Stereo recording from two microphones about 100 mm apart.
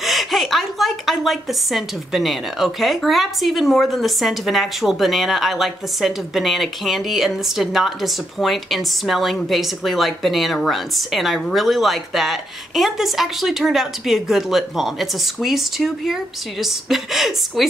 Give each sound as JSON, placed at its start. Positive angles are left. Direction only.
{"t": 0.0, "sound": "a woman's voice", "side_deg": 0}